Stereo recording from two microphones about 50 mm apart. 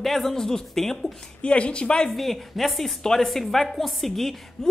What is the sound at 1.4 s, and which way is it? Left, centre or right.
Speech, left.